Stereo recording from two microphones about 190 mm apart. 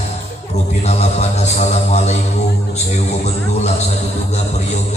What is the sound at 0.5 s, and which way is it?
A man's voice, 35° left (ahead or behind).